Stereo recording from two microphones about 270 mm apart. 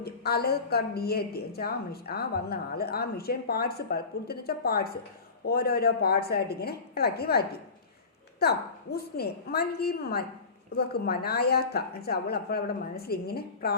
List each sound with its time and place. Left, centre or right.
0.0 s a woman's voice: left